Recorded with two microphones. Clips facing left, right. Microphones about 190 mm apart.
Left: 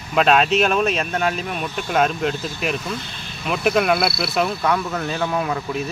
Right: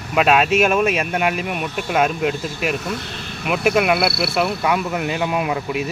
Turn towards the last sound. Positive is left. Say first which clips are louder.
# right 2 dB
turn(degrees=-10)  # may be behind; listen again after turning